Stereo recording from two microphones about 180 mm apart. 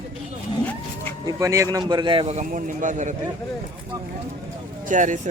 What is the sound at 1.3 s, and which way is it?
A man's voice, 15° right (ahead or behind).